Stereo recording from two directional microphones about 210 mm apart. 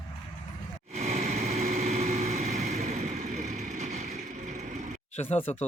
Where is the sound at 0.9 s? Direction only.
30° right (ahead or behind).